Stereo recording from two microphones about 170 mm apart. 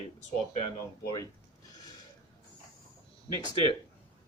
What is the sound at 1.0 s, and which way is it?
Speech, 20° left (ahead or behind).